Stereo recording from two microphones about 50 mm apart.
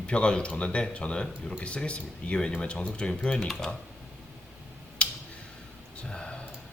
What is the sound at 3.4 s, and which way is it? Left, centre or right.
Speech, centre.